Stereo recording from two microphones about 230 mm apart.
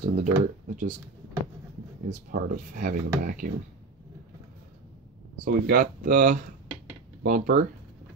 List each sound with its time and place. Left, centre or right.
0.0 s speech: right
2.0 s speech: right
5.4 s speech: right